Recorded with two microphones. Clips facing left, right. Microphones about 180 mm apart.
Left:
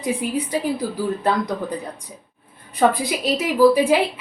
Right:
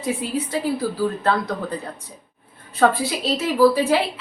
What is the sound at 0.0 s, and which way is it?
Speech, 15° left (ahead or behind).